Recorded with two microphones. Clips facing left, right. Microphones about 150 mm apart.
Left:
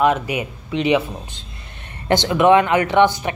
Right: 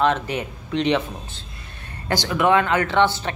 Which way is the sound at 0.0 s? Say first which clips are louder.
Left 3 dB; 10° left (ahead or behind).